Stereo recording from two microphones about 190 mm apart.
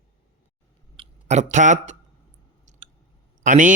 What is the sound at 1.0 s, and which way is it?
Speech, 35° right (ahead or behind).